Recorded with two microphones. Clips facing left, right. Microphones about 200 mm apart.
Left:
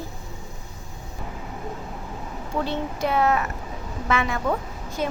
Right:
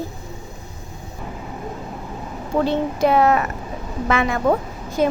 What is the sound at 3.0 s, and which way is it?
Speech, 85° right.